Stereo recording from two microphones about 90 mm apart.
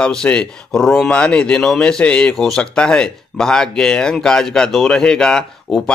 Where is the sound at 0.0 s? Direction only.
10° left (ahead or behind).